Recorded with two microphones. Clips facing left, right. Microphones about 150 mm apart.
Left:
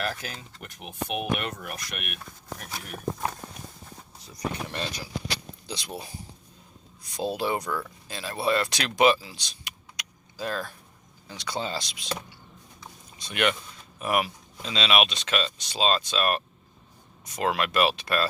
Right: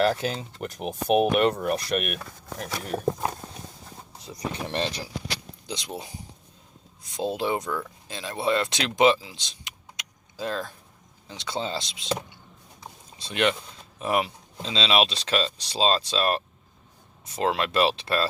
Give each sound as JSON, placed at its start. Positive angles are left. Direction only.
{"t": 0.0, "sound": "speech", "side_deg": -30}